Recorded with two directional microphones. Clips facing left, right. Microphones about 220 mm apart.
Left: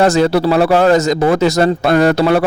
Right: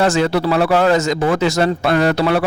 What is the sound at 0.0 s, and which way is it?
A man's voice, 35° left (ahead or behind).